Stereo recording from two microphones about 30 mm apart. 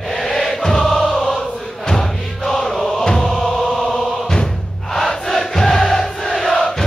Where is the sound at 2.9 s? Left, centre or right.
Centre.